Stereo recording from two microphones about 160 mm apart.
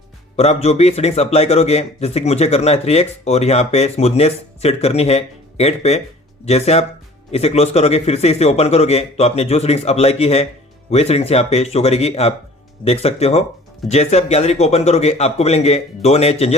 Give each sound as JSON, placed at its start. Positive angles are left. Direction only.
{"t": 0.3, "sound": "a man's voice", "side_deg": 40}